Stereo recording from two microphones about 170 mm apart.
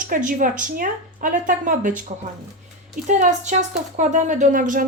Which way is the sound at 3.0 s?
45° right (ahead or behind).